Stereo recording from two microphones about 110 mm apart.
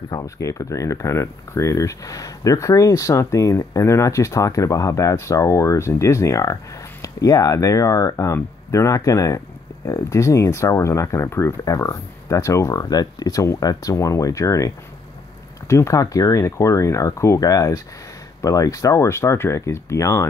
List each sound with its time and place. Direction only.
0.1 s speech: 30° left (ahead or behind)
15.7 s speech: 30° left (ahead or behind)